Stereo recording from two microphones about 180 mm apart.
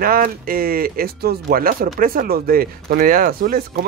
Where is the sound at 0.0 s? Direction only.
55° right (ahead or behind).